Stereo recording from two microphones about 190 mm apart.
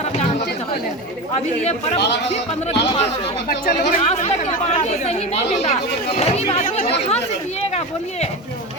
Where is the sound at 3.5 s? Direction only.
50° left (ahead or behind).